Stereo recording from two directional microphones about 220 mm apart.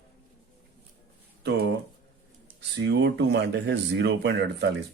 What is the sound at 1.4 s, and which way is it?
Speech, 50° right (ahead or behind).